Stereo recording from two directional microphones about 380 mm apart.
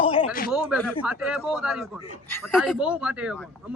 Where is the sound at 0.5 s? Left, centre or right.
Centre.